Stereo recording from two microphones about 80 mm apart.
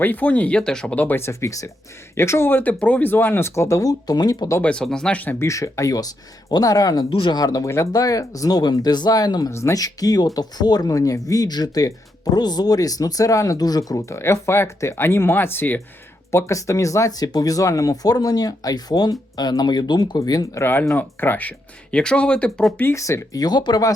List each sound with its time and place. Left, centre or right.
0.0 s speech: left
0.9 s speech: left
1.2 s speech: left
4.6 s speech: centre
5.4 s speech: left
7.2 s speech: left
7.4 s speech: left
9.5 s speech: left
9.7 s speech: left
16.3 s speech: left
20.6 s speech: left; by 22.7 s centre
22.9 s speech: left